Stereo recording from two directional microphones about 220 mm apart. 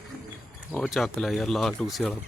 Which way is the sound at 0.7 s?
Centre (ahead or behind).